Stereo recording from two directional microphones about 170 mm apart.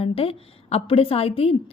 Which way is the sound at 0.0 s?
35° left (ahead or behind).